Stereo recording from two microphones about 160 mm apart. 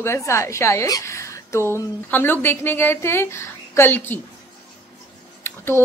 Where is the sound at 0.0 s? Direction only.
15° left (ahead or behind).